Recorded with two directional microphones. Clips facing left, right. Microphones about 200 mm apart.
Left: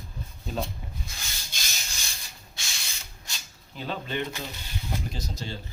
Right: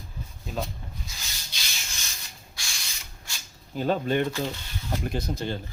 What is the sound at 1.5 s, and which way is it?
Rub, 50° left (ahead or behind).